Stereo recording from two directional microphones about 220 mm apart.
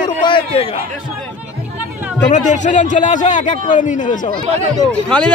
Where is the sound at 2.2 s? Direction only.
35° left (ahead or behind).